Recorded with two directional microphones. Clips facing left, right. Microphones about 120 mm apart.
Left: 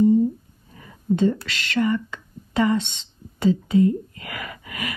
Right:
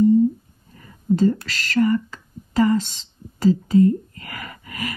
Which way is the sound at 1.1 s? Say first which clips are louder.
Right 2 dB; 40° right (ahead or behind).